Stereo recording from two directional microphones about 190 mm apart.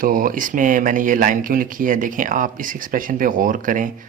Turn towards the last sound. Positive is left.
turn(degrees=-45)  # may be behind; listen again after turning